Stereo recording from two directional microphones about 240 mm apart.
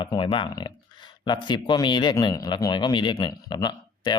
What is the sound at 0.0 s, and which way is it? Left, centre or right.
Speech, left.